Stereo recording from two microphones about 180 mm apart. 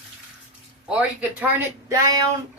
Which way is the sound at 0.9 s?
10° right (ahead or behind).